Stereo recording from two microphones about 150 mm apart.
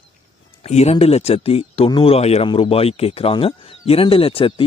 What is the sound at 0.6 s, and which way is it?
Speech, 45° left (ahead or behind).